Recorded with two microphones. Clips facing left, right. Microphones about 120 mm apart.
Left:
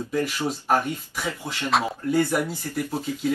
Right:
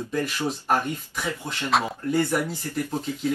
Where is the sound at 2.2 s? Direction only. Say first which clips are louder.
Left 1 dB; 15° left (ahead or behind).